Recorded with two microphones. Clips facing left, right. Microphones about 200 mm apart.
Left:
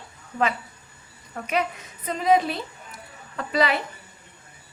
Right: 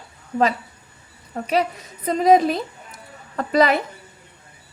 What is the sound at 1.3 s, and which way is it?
A woman's voice, 35° right (ahead or behind).